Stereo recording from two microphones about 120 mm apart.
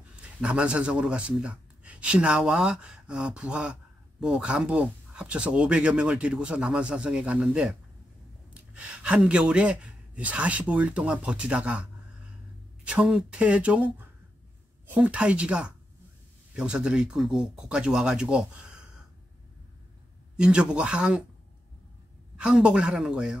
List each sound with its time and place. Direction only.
0.4 s speech: 10° right (ahead or behind)
8.7 s speech: 10° right (ahead or behind)
14.9 s speech: 10° right (ahead or behind)
20.3 s speech: 10° right (ahead or behind)
22.4 s speech: 5° right (ahead or behind)